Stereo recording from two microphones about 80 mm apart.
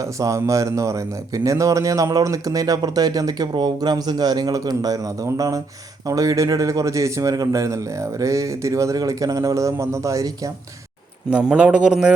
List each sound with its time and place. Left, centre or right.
0.0 s a man's voice: right
11.3 s a man's voice: centre